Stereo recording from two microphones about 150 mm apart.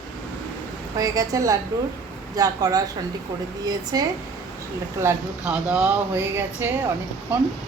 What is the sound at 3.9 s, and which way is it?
Speech, 25° right (ahead or behind).